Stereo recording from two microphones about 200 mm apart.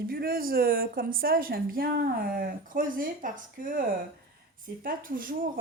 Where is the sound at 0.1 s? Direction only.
45° right (ahead or behind).